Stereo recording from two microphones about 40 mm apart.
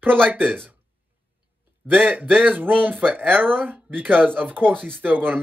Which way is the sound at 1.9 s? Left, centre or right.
Right.